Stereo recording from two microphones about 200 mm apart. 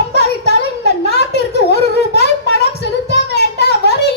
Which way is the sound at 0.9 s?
55° left (ahead or behind).